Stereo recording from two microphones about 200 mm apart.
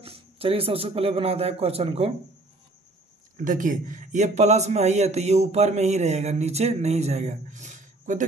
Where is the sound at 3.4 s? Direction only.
40° right (ahead or behind).